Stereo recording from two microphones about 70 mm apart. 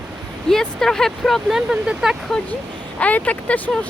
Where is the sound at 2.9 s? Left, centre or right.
Centre.